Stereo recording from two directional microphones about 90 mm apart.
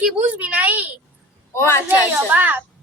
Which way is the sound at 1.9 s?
20° right (ahead or behind).